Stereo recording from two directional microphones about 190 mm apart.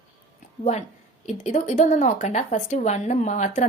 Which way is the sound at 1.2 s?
35° left (ahead or behind).